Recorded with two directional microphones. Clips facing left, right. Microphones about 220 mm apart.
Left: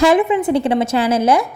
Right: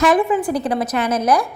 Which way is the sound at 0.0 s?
25° left (ahead or behind).